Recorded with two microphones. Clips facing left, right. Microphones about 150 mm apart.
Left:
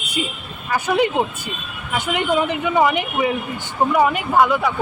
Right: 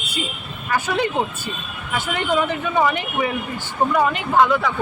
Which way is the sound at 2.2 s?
15° left (ahead or behind).